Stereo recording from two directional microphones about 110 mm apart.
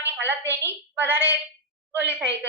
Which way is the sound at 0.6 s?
20° right (ahead or behind).